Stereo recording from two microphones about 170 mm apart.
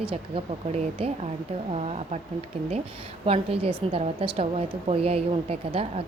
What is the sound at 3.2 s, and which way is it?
Speech, 35° right (ahead or behind).